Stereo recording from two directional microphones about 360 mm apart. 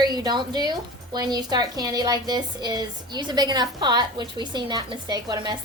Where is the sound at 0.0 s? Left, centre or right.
Centre.